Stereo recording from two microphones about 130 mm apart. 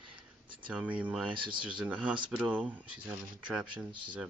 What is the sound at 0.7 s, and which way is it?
Speech, 10° right (ahead or behind).